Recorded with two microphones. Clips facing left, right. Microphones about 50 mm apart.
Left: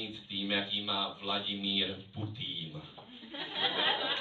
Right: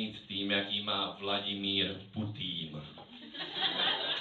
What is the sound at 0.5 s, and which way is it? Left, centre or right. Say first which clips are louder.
A man's voice: even; right.